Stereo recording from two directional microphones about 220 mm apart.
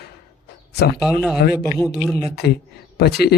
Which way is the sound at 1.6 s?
15° left (ahead or behind).